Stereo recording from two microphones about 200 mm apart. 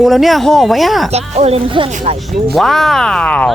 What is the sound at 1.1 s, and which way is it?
Speech, 30° right (ahead or behind).